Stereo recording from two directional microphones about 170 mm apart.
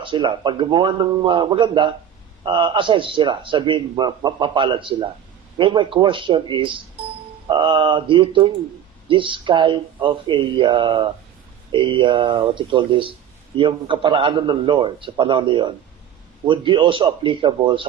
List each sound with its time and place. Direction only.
0.0 s a man's voice: 30° right (ahead or behind)